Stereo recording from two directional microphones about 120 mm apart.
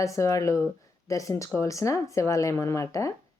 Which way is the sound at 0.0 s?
25° left (ahead or behind).